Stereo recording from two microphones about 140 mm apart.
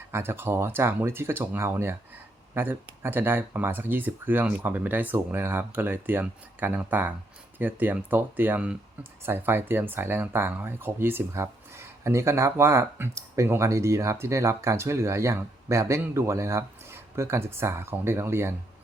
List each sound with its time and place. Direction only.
0.1 s speech: 15° right (ahead or behind)